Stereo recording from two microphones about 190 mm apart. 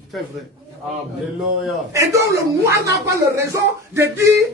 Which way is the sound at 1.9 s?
15° right (ahead or behind).